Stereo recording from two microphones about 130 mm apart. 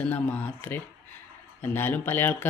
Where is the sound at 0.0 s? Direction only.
15° left (ahead or behind).